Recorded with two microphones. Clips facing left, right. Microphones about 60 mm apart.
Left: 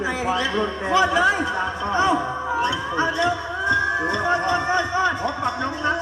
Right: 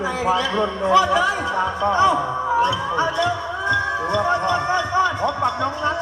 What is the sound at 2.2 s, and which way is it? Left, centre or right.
Music, right.